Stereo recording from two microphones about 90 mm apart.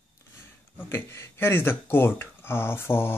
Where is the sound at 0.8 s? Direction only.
25° left (ahead or behind).